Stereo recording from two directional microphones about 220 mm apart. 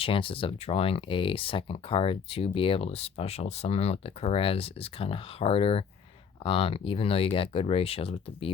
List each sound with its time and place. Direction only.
0.0 s speech: 25° left (ahead or behind)